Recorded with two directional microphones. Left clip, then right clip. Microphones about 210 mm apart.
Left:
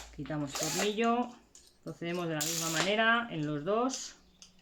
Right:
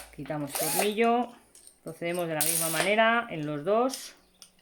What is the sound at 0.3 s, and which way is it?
Speech, 35° right (ahead or behind).